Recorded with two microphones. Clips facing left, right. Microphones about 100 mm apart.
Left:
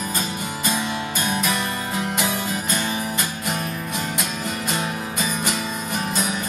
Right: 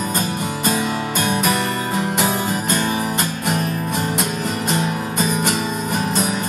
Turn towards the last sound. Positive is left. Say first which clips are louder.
# right 5 dB
turn(degrees=-50)  # may be behind; listen again after turning